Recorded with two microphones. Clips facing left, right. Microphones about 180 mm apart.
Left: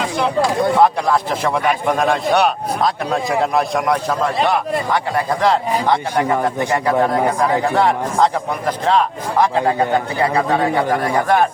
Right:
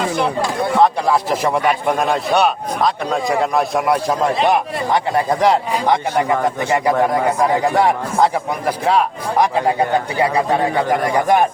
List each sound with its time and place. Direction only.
0.8 s a man's voice: 10° right (ahead or behind)
4.4 s speech: 20° right (ahead or behind)